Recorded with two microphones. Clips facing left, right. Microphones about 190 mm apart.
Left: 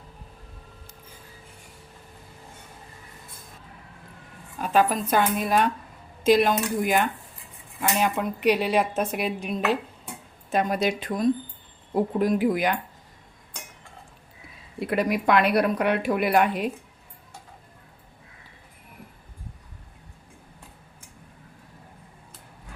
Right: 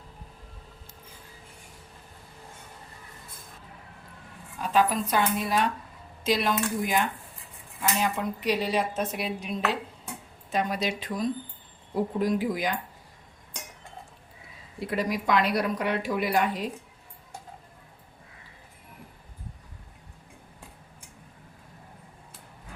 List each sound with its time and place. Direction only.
4.7 s a woman's voice: 55° left (ahead or behind)
14.8 s a woman's voice: 60° left (ahead or behind)